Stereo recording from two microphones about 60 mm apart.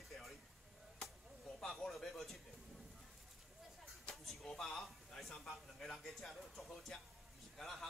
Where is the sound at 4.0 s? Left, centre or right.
Centre.